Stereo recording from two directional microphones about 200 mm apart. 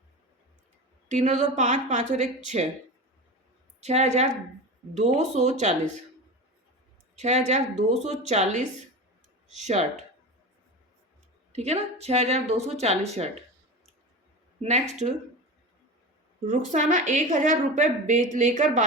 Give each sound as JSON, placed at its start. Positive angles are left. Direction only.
{"t": 1.0, "sound": "a woman's voice", "side_deg": -35}
{"t": 3.8, "sound": "speech", "side_deg": -35}
{"t": 7.2, "sound": "speech", "side_deg": -35}
{"t": 11.5, "sound": "speech", "side_deg": -30}
{"t": 14.6, "sound": "speech", "side_deg": -35}
{"t": 16.5, "sound": "speech", "side_deg": -40}